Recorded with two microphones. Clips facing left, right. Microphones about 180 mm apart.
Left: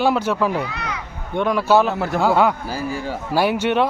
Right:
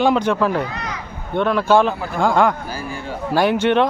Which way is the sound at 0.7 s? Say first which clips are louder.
Even; 35° right (ahead or behind).